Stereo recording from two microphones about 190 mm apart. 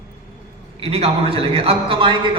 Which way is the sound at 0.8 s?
30° right (ahead or behind).